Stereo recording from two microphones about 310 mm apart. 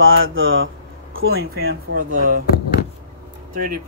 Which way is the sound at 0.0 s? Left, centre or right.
Right.